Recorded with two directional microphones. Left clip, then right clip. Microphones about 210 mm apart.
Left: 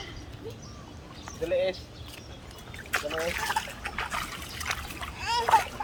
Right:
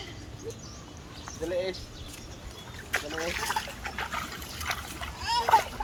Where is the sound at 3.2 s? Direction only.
15° right (ahead or behind).